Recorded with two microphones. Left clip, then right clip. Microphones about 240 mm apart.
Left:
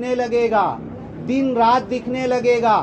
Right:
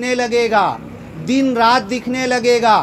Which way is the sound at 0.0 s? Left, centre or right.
Right.